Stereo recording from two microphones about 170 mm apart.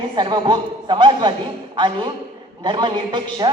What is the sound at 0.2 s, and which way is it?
A man's voice, 25° right (ahead or behind).